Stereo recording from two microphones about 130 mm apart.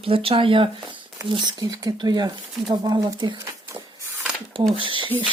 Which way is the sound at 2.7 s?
30° right (ahead or behind).